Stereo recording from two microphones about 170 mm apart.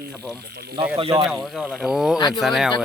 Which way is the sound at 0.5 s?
70° right (ahead or behind).